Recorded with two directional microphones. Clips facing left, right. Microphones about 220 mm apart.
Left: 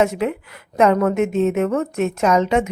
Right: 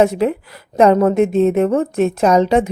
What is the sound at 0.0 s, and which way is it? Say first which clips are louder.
A woman's voice: right 4 dB; 35° right (ahead or behind).